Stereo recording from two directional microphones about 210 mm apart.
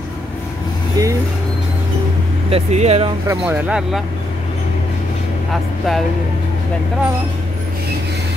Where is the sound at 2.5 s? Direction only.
30° right (ahead or behind).